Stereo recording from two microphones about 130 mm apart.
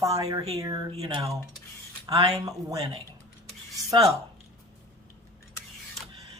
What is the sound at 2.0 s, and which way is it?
Speech, 30° right (ahead or behind).